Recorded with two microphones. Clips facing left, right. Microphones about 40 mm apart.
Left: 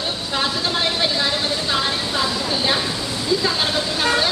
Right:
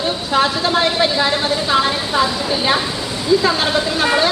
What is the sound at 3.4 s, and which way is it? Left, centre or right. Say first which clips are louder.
Speech: right 5 dB; centre.